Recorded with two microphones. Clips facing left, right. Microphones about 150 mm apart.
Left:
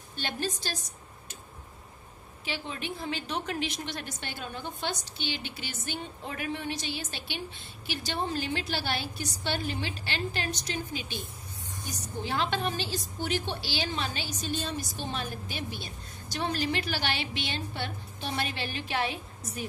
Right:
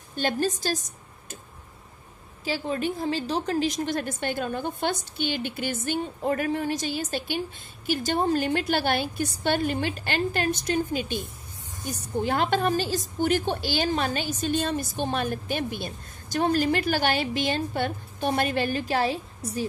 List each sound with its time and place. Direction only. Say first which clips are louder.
0.1 s a woman's voice: right 8 dB; 45° right (ahead or behind)
2.4 s a woman's voice: right 9 dB; 40° right (ahead or behind)